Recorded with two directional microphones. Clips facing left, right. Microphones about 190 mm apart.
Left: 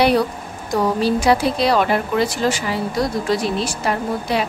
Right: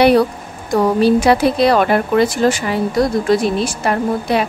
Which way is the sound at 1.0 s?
60° right (ahead or behind).